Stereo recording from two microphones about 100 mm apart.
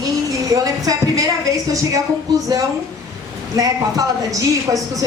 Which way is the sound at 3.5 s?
35° right (ahead or behind).